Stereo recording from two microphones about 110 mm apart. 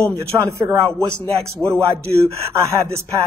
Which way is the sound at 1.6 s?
20° left (ahead or behind).